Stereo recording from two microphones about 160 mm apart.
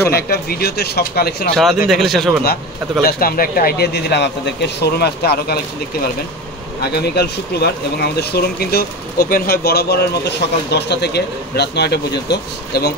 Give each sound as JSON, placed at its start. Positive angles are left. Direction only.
{"t": 0.1, "sound": "speech", "side_deg": 75}
{"t": 1.5, "sound": "a man's voice", "side_deg": 0}
{"t": 3.0, "sound": "speech", "side_deg": 70}
{"t": 6.8, "sound": "speech", "side_deg": 90}
{"t": 10.7, "sound": "speech", "side_deg": 90}